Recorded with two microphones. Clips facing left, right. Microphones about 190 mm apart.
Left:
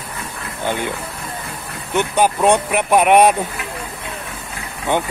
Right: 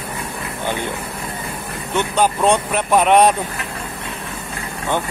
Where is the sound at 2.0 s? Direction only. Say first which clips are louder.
Left 1 dB; 15° left (ahead or behind).